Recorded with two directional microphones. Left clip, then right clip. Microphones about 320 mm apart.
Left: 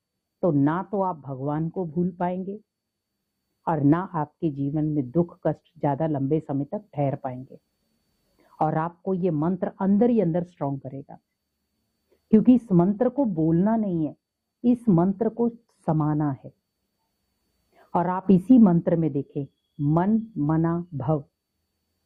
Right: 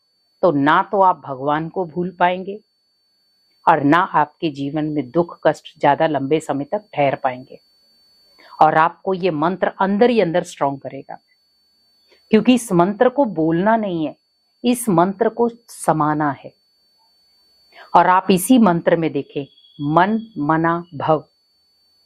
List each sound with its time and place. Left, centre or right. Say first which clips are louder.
0.3 s speech: right 9 dB; centre
3.6 s a woman's voice: right 10 dB; centre
17.7 s a woman's voice: right 13 dB; centre
19.5 s a sound: right 4 dB; right
20.0 s speech: right 11 dB; centre
20.2 s speech: right 4 dB; right
20.5 s speech: right 10 dB; centre